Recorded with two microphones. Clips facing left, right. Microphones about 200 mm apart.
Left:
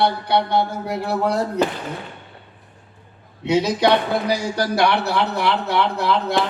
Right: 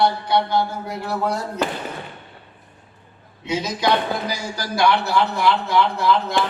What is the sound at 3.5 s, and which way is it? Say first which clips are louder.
A man's voice: left 4 dB; 65° left (ahead or behind).